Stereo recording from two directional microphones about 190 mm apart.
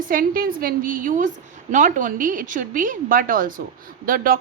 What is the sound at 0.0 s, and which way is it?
A woman's voice, 45° right (ahead or behind).